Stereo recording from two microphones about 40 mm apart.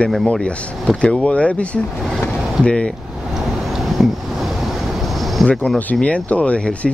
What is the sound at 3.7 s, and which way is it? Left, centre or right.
Vehicle, centre.